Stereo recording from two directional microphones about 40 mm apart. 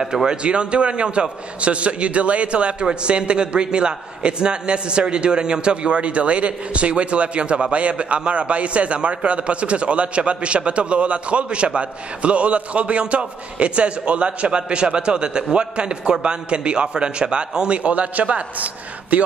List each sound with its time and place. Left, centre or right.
0.0 s a man's voice: centre; by 19.2 s right